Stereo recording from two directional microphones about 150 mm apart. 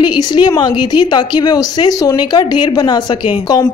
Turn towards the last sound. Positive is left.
turn(degrees=25)  # may be behind; listen again after turning